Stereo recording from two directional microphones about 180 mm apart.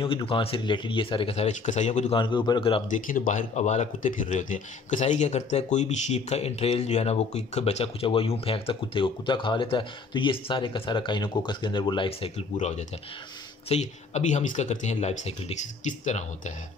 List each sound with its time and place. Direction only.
0.0 s speech: 30° left (ahead or behind)
2.9 s speech: 45° left (ahead or behind); by 12.3 s 30° left (ahead or behind)
12.5 s speech: 40° left (ahead or behind)